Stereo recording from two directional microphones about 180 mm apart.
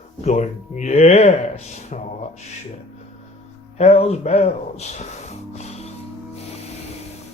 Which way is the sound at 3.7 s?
35° left (ahead or behind).